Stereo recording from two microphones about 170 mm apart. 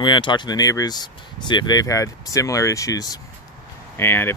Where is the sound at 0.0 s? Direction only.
25° left (ahead or behind).